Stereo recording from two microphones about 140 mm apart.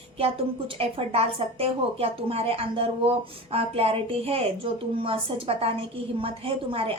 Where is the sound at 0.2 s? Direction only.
40° right (ahead or behind).